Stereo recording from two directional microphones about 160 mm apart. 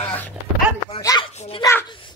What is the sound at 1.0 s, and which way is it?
Speech, 20° left (ahead or behind).